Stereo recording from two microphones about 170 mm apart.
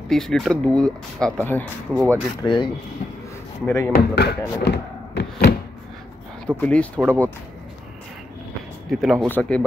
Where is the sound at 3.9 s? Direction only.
75° left (ahead or behind).